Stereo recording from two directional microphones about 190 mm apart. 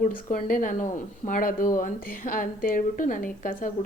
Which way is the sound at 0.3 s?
45° left (ahead or behind).